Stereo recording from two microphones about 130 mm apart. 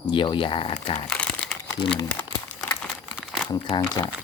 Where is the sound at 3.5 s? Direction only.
30° left (ahead or behind).